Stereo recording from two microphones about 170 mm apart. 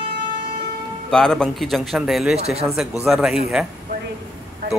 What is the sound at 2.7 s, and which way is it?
Speech, 5° right (ahead or behind).